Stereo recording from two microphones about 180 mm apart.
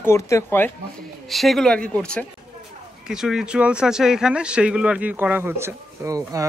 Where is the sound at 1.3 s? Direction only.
Centre (ahead or behind).